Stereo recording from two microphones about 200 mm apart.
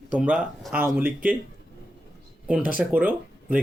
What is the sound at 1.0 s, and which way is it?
Speech, 45° right (ahead or behind).